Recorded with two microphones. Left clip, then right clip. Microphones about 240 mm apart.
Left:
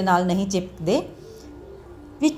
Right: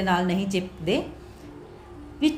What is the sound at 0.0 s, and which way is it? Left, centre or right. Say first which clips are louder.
A woman's voice: left 4 dB; left.